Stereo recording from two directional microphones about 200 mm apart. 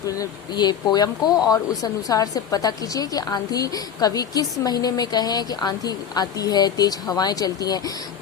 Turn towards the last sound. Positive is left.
turn(degrees=20)  # may be behind; listen again after turning